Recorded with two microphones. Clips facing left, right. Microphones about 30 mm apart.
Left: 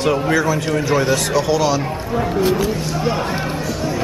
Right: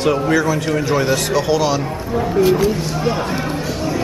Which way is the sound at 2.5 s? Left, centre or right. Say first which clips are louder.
Right 2 dB; centre.